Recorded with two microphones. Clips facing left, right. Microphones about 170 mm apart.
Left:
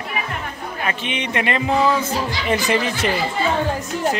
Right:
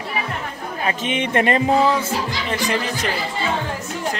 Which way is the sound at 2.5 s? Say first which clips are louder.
Left 4 dB; 5° left (ahead or behind).